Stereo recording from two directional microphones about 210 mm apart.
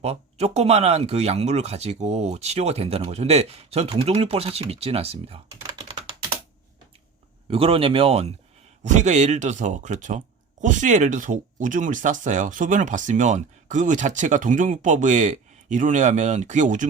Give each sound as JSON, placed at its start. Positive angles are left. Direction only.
{"t": 0.0, "sound": "speech", "side_deg": -30}
{"t": 7.5, "sound": "speech", "side_deg": -25}